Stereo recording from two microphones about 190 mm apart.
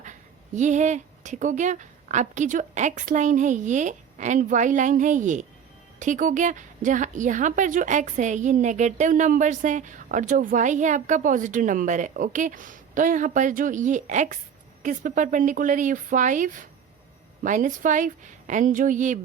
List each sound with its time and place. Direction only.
0.0 s a woman's voice: 40° right (ahead or behind)